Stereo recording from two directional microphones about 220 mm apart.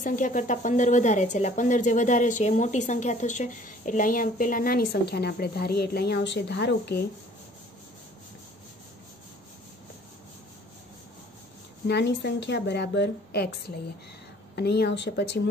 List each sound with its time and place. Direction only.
0.0 s a woman's voice: 35° left (ahead or behind)
11.9 s a woman's voice: 50° left (ahead or behind)
14.5 s a woman's voice: 45° left (ahead or behind)